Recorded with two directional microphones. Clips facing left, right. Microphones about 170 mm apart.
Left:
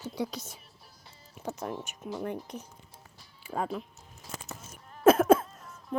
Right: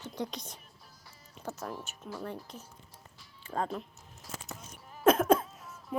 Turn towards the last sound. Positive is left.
turn(degrees=0)  # may be behind; listen again after turning